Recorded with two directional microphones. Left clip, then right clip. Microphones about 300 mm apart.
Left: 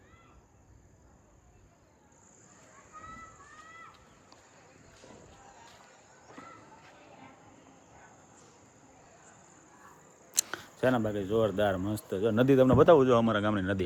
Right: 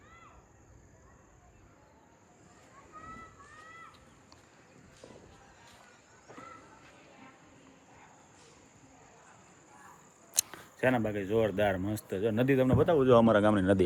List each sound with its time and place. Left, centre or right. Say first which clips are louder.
10.4 s a sound: left 1 dB; left
10.8 s speech: left 1 dB; centre
13.0 s speech: right 2 dB; centre